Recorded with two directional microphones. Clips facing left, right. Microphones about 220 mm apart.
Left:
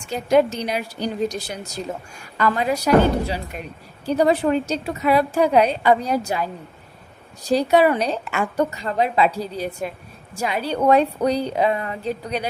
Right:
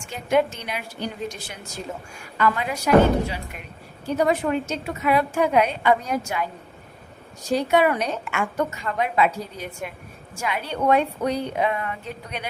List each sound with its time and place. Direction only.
0.0 s a woman's voice: 40° left (ahead or behind)